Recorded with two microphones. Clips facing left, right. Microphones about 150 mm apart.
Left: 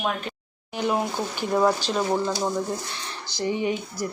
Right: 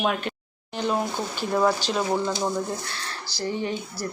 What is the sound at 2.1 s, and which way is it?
Speech, centre (ahead or behind).